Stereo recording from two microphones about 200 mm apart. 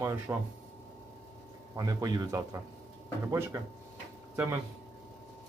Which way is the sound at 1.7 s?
20° right (ahead or behind).